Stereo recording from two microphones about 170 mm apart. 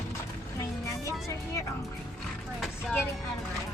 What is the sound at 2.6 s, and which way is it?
Vehicle, 5° left (ahead or behind).